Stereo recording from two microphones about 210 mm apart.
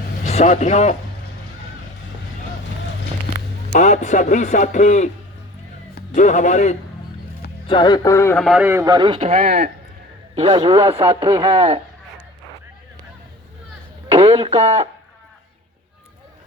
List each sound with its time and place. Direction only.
0.3 s a man's voice: 35° left (ahead or behind)
3.7 s a man's voice: 35° left (ahead or behind)
6.1 s a man's voice: 35° left (ahead or behind)
7.7 s a man's voice: 20° left (ahead or behind); by 9.4 s 25° right (ahead or behind)
9.4 s speech: 45° right (ahead or behind)
10.3 s a man's voice: 25° right (ahead or behind)
14.1 s radio: 30° right (ahead or behind)